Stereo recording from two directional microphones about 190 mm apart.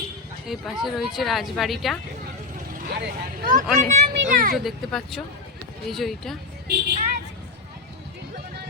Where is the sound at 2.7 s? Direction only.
55° right (ahead or behind).